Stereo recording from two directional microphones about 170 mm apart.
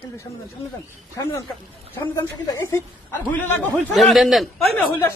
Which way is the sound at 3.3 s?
10° left (ahead or behind).